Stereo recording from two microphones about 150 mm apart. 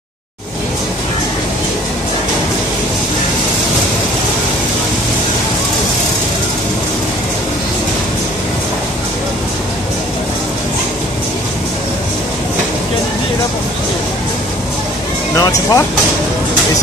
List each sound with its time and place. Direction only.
15.3 s vehicle: 25° left (ahead or behind)